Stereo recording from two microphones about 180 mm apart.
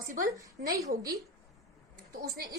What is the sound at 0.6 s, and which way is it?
Speech, 20° right (ahead or behind).